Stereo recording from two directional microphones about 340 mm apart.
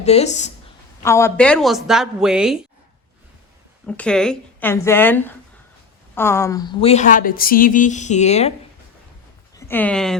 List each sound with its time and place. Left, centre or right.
0.0 s speech: centre
1.0 s a woman's voice: centre
3.8 s a woman's voice: centre
9.6 s speech: centre